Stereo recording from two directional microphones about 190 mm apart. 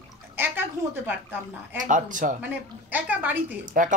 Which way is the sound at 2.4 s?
10° right (ahead or behind).